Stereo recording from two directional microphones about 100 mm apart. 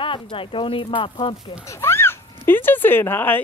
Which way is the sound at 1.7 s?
25° left (ahead or behind).